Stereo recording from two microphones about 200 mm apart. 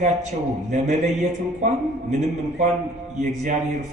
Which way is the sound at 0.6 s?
35° right (ahead or behind).